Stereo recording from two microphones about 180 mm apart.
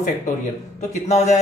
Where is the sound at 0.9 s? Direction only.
40° left (ahead or behind).